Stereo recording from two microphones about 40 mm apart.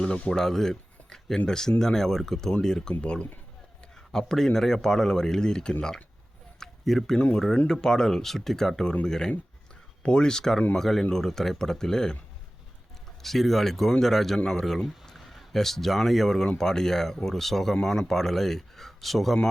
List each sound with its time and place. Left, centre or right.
0.0 s speech: centre
2.9 s speech: left
4.1 s speech: centre
6.8 s speech: centre
7.7 s speech: centre
13.2 s speech: centre
15.1 s speech: centre